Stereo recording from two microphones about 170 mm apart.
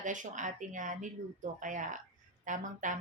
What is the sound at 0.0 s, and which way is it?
Speech, 50° right (ahead or behind).